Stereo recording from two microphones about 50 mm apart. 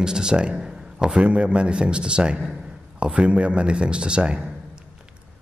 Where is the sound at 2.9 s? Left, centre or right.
Right.